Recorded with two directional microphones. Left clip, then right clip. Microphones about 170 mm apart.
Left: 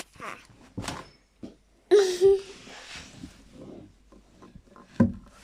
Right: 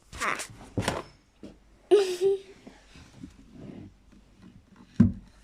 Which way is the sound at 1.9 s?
Centre (ahead or behind).